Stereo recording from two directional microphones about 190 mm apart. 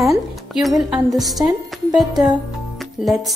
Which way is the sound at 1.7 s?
Centre (ahead or behind).